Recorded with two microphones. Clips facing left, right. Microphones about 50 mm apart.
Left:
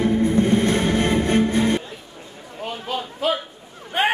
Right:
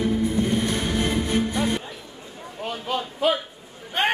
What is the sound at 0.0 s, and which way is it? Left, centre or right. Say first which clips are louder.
Music: left 4 dB; left.